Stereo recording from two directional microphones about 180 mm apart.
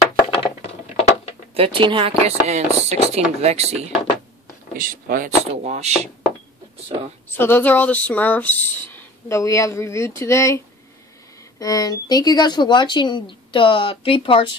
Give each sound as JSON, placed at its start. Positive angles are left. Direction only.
{"t": 0.1, "sound": "a sound", "side_deg": 25}
{"t": 1.5, "sound": "speech", "side_deg": -30}
{"t": 4.7, "sound": "speech", "side_deg": -50}
{"t": 7.2, "sound": "speech", "side_deg": 10}
{"t": 11.6, "sound": "speech", "side_deg": 20}